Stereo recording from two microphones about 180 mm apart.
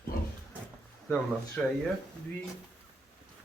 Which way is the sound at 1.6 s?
5° left (ahead or behind).